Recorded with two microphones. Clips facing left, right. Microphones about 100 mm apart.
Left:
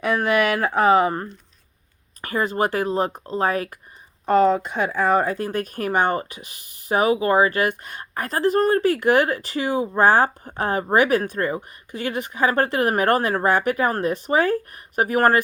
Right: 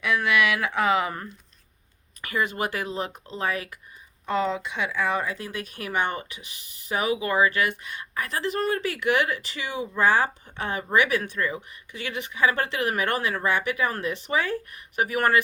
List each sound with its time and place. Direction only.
0.0 s speech: 40° left (ahead or behind)